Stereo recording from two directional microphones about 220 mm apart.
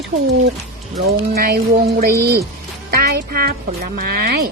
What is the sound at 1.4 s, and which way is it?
Speech, 40° right (ahead or behind).